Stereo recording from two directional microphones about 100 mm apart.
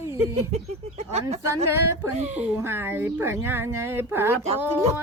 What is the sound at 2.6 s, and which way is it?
Speech, 25° right (ahead or behind).